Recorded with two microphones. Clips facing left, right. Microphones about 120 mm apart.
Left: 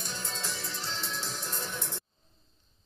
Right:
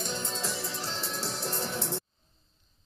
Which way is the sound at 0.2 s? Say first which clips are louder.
Right 4 dB; centre (ahead or behind).